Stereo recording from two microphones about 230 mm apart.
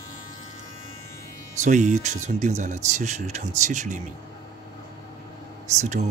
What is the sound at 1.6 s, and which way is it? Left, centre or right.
Speech, right.